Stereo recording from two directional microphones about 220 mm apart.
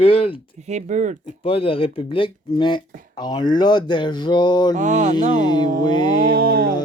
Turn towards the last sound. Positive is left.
turn(degrees=-45)  # may be behind; listen again after turning